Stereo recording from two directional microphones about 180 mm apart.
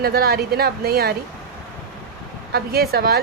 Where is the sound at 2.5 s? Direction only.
60° right (ahead or behind).